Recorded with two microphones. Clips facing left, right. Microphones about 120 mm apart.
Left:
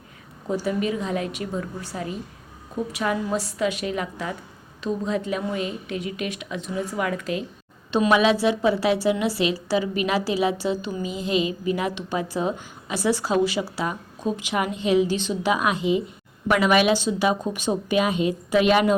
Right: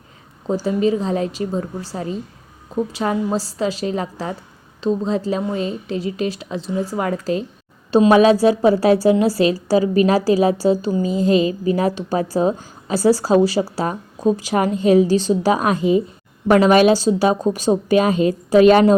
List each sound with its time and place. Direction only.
0.4 s a woman's voice: 30° right (ahead or behind)